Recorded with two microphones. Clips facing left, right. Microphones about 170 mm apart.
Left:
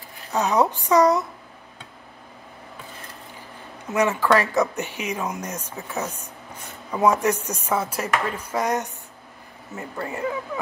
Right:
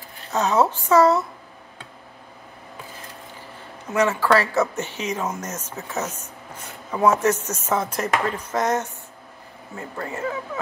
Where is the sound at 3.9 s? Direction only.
15° left (ahead or behind).